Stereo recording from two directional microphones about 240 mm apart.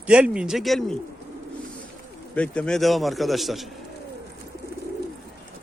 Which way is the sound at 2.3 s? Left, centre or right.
Centre.